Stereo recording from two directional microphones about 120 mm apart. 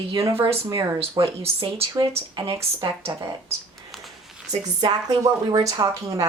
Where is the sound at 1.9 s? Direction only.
40° right (ahead or behind).